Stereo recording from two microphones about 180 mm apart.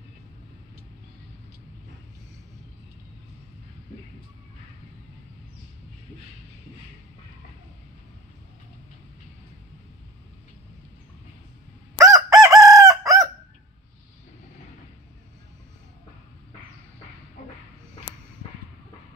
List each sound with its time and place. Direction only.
12.0 s chicken: 20° right (ahead or behind)